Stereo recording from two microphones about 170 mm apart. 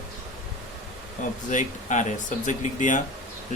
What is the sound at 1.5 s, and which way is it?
Speech, 45° left (ahead or behind).